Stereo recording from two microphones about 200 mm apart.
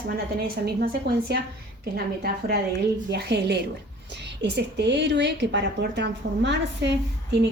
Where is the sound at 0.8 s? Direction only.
50° right (ahead or behind).